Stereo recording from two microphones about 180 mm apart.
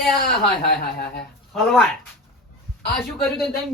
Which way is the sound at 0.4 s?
60° left (ahead or behind).